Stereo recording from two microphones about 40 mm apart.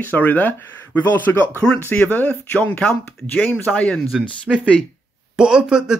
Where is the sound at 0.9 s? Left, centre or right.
Left.